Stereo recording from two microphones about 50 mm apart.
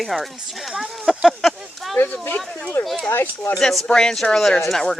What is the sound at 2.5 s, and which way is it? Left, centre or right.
Speech, left.